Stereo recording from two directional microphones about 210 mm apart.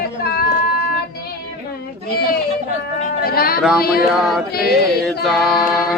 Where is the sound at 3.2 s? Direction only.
45° left (ahead or behind).